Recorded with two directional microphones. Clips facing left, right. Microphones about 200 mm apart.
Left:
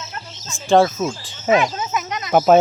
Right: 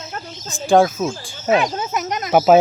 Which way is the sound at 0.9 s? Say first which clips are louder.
Right 1 dB; centre (ahead or behind).